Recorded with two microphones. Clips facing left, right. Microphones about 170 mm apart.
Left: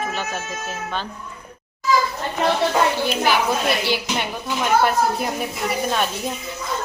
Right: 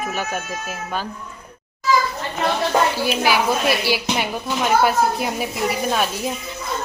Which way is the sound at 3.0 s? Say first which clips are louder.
Right 1 dB; 5° right (ahead or behind).